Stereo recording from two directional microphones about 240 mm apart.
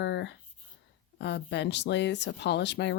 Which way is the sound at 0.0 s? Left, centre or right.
Left.